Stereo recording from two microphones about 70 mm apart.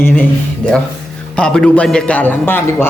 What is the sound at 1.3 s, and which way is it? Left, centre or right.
A man's voice, centre.